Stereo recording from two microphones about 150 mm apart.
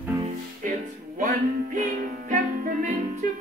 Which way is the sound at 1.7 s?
60° right (ahead or behind).